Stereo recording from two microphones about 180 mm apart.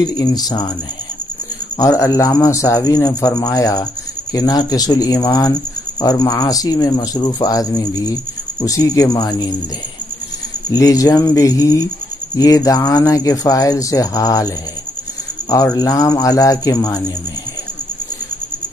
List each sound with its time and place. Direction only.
0.0 s speech: 20° left (ahead or behind)
1.8 s speech: 15° left (ahead or behind)
10.7 s speech: 20° left (ahead or behind)
15.5 s speech: 20° left (ahead or behind)